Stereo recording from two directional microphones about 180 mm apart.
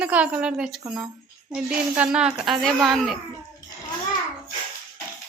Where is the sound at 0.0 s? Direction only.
5° right (ahead or behind).